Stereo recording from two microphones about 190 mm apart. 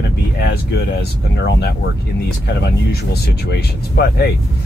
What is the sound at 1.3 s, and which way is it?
Speech, 65° left (ahead or behind).